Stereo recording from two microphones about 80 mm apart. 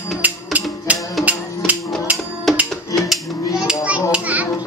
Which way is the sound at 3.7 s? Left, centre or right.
Centre.